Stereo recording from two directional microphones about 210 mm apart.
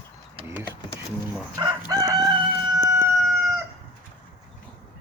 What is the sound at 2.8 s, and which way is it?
Chicken, 10° right (ahead or behind).